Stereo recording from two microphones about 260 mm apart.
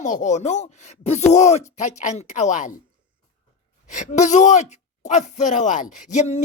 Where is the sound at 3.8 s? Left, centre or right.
Left.